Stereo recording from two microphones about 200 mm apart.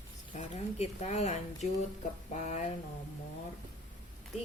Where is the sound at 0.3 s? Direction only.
35° left (ahead or behind).